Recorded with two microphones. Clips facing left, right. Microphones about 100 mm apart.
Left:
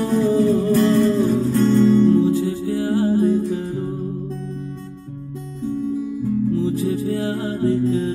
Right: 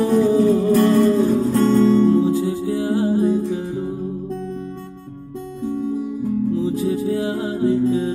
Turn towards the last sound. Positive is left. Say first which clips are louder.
# right 1 dB
turn(degrees=-15)  # may be behind; listen again after turning